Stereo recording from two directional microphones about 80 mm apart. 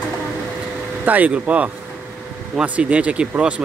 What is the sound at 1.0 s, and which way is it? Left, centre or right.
Speech, right.